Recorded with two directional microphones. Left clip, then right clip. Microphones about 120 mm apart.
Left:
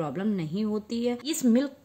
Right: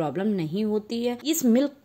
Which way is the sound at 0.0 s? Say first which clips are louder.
Right 4 dB; 30° right (ahead or behind).